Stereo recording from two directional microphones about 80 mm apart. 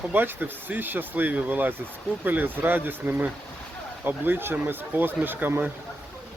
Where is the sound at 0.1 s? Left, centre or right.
Right.